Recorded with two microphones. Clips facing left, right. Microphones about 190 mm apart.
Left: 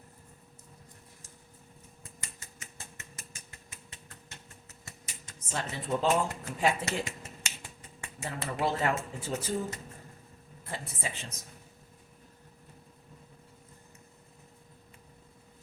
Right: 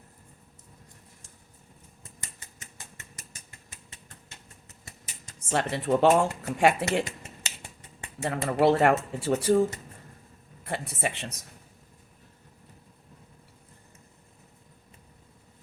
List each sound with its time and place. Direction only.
5.5 s speech: 75° right (ahead or behind)
8.2 s speech: 70° right (ahead or behind)
10.7 s speech: 70° right (ahead or behind)